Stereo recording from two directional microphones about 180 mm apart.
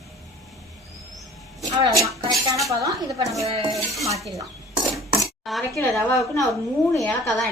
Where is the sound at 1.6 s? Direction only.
20° right (ahead or behind).